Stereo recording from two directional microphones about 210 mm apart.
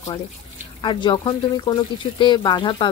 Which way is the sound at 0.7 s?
20° left (ahead or behind).